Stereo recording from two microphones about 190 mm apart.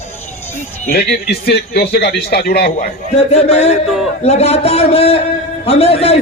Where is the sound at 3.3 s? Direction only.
35° left (ahead or behind).